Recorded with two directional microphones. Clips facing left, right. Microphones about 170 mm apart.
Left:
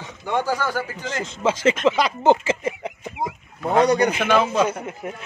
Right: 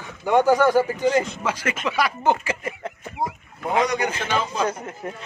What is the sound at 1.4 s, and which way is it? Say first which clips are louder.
Speech: left 7 dB; 25° left (ahead or behind).